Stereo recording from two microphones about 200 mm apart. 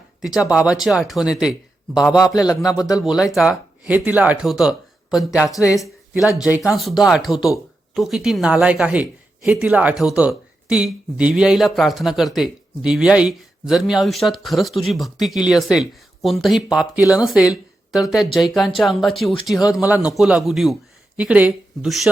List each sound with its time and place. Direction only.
0.2 s speech: 5° right (ahead or behind)
2.3 s music: 20° left (ahead or behind)
2.6 s speech: 15° left (ahead or behind)
3.0 s speech: centre (ahead or behind)
5.5 s speech: 15° left (ahead or behind)
6.4 s a man's voice: 5° right (ahead or behind)